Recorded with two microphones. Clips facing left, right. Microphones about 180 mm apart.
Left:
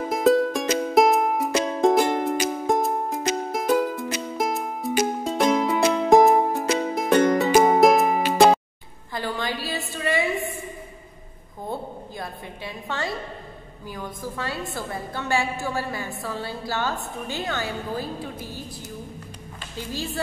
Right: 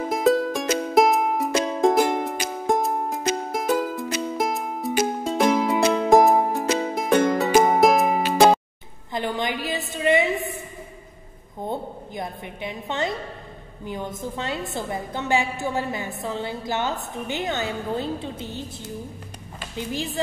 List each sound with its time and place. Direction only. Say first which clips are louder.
0.0 s music: left 1 dB; centre (ahead or behind)
9.1 s a woman's voice: right 2 dB; 20° right (ahead or behind)
11.6 s a woman's voice: right 2 dB; 20° right (ahead or behind)
19.8 s a woman's voice: right 2 dB; 20° right (ahead or behind)